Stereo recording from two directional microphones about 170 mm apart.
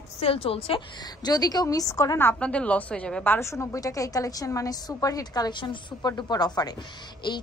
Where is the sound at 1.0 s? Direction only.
25° left (ahead or behind).